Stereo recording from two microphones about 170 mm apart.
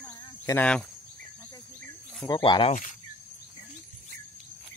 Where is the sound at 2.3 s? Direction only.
30° left (ahead or behind).